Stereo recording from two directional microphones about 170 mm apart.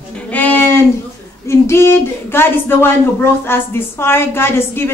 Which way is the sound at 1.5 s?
15° left (ahead or behind).